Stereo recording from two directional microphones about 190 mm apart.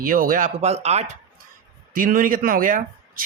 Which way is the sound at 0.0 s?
50° right (ahead or behind).